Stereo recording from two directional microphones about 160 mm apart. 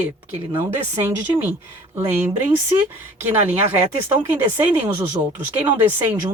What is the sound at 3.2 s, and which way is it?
Speech, 15° right (ahead or behind).